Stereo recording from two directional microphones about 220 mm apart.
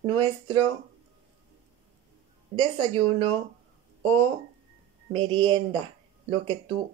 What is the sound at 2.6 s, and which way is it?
Speech, 20° right (ahead or behind).